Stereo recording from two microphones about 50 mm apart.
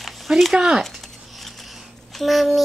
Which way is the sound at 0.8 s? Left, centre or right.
Centre.